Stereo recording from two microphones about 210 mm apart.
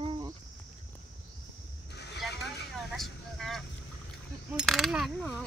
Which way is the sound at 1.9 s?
55° left (ahead or behind).